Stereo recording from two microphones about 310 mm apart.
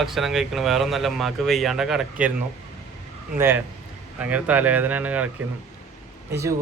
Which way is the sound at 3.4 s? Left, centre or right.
Centre.